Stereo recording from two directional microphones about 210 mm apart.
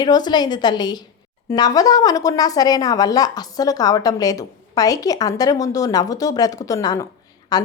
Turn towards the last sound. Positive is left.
turn(degrees=20)  # may be behind; listen again after turning